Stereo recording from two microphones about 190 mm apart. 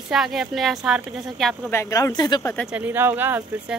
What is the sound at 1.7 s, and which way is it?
Speech, 15° left (ahead or behind).